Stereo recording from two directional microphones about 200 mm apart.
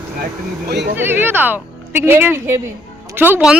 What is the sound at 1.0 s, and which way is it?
Speech, 10° right (ahead or behind).